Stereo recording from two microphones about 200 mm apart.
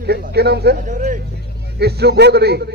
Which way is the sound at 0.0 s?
50° right (ahead or behind).